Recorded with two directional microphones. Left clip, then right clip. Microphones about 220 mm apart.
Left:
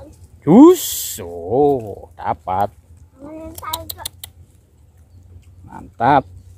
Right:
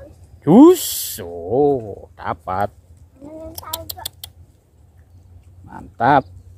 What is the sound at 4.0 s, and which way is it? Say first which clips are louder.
Computer keyboard: even; 45° left (ahead or behind).